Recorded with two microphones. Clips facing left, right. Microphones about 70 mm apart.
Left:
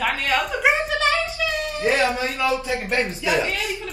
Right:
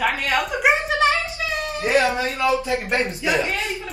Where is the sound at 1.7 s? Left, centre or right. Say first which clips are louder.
Right 2 dB; right.